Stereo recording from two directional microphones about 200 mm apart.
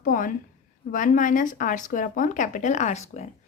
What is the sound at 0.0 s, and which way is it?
A woman's voice, 40° left (ahead or behind).